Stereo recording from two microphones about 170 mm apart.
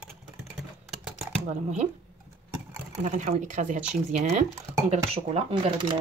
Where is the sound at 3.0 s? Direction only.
45° right (ahead or behind).